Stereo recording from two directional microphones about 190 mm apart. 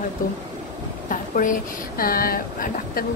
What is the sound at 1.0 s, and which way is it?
Speech, 45° left (ahead or behind).